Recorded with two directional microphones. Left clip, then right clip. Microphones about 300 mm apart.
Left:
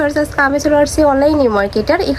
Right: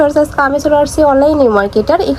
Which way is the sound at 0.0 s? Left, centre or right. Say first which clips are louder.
Right 4 dB; centre.